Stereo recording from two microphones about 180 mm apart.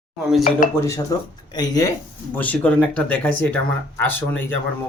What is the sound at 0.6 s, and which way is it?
Speech, 50° left (ahead or behind).